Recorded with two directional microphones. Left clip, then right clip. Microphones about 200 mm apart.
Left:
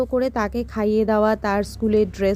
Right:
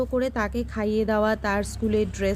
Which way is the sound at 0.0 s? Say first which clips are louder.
Left 4 dB; 15° left (ahead or behind).